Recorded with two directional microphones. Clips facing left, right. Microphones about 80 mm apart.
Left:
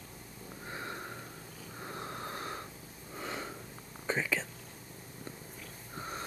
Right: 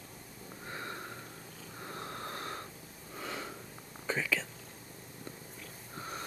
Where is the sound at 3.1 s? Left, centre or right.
Centre.